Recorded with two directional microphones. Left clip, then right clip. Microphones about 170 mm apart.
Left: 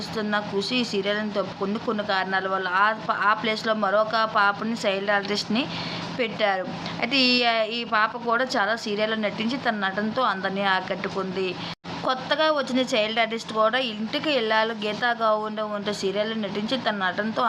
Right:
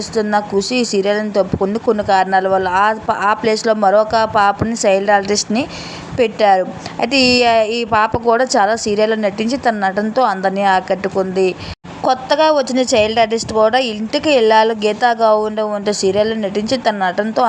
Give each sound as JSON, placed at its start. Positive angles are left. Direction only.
{"t": 0.2, "sound": "a woman's voice", "side_deg": -40}
{"t": 3.8, "sound": "a sound", "side_deg": -40}
{"t": 4.8, "sound": "a woman's voice", "side_deg": -40}